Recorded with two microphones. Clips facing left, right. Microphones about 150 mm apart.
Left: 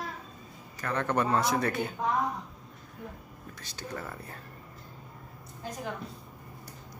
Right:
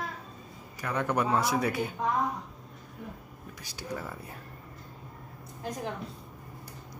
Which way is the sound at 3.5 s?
10° right (ahead or behind).